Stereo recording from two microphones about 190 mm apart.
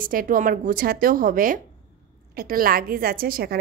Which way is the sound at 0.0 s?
45° right (ahead or behind).